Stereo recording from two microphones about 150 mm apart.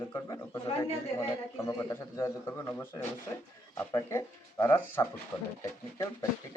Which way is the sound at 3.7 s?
15° left (ahead or behind).